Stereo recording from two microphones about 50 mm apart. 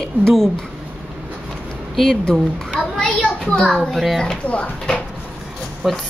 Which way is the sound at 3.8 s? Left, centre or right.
Centre.